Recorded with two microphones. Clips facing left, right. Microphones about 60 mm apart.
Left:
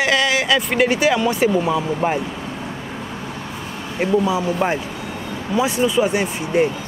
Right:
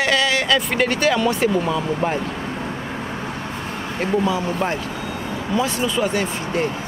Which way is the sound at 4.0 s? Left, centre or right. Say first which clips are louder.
Left 3 dB; centre.